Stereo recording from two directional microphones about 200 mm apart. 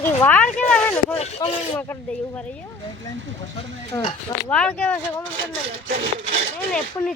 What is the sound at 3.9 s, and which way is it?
Speech, 15° left (ahead or behind).